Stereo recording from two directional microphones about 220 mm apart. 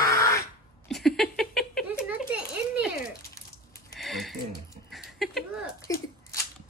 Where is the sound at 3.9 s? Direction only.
Centre (ahead or behind).